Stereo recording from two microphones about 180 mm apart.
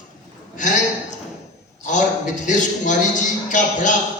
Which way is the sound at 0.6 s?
45° left (ahead or behind).